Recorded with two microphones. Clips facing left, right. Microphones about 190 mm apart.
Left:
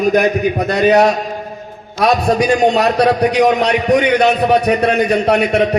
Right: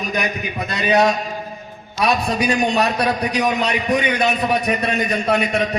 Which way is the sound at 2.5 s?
65° left (ahead or behind).